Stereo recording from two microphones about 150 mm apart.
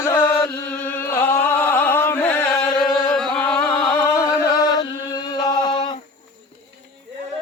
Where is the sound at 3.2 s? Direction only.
5° left (ahead or behind).